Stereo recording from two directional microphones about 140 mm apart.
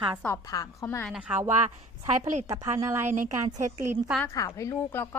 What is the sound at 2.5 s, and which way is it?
Speech, 20° right (ahead or behind).